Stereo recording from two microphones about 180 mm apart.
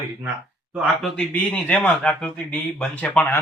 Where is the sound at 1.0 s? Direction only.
10° left (ahead or behind).